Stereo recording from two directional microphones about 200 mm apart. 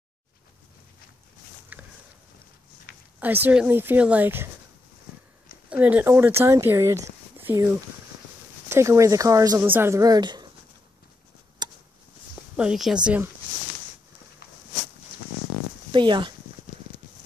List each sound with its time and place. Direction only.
1.7 s a sound: 10° right (ahead or behind)
3.2 s speech: 10° right (ahead or behind)
5.7 s speech: 5° right (ahead or behind)
11.6 s a sound: 20° right (ahead or behind)
12.5 s speech: 5° right (ahead or behind)
15.9 s speech: 25° right (ahead or behind)